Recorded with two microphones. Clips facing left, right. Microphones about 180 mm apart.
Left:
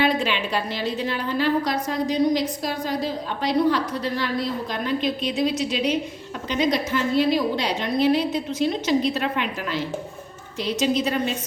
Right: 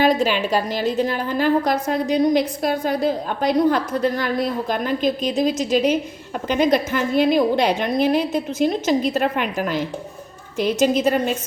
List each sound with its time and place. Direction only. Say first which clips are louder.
0.0 s a woman's voice: right 4 dB; 40° right (ahead or behind)